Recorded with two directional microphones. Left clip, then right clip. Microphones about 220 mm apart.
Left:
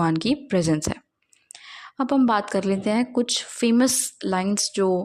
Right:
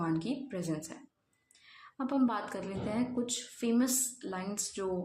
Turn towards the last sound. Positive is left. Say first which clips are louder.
# left 14 dB
turn(degrees=40)  # may be behind; listen again after turning